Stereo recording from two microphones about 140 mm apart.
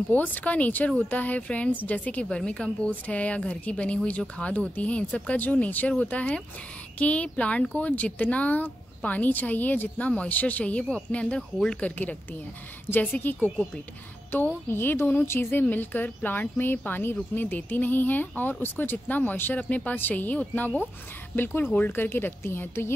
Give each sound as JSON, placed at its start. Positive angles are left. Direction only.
{"t": 0.1, "sound": "speech", "side_deg": 10}